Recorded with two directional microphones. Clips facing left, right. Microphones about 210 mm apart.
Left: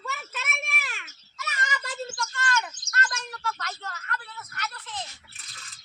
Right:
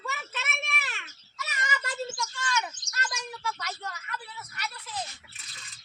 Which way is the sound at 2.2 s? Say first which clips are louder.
Left 2 dB; 10° right (ahead or behind).